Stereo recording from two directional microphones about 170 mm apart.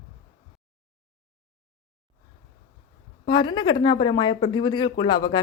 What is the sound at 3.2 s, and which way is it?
A woman's voice, 25° left (ahead or behind).